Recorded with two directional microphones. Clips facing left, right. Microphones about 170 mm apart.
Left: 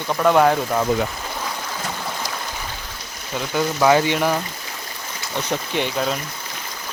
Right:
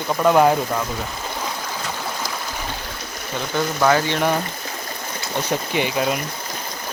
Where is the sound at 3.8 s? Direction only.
15° left (ahead or behind).